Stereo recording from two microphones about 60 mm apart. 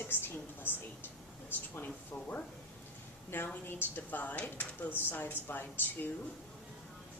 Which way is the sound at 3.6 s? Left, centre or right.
Left.